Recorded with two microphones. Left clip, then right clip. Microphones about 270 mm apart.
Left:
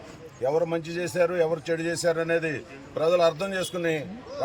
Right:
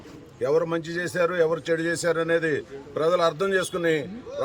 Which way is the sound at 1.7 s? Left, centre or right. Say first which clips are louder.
Right 2 dB; centre.